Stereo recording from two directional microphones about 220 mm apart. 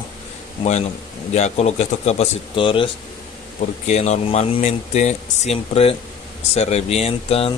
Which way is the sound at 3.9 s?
30° left (ahead or behind).